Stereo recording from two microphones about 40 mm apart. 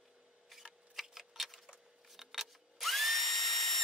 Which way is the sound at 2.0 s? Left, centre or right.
Centre.